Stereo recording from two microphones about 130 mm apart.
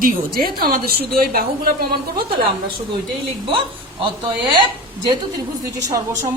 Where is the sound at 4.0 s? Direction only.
40° right (ahead or behind).